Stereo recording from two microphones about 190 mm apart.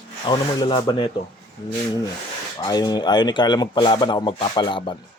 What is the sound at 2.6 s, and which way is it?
Speech, 20° left (ahead or behind).